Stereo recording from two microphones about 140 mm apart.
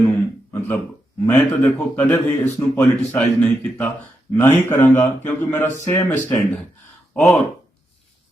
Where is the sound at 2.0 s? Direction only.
20° left (ahead or behind).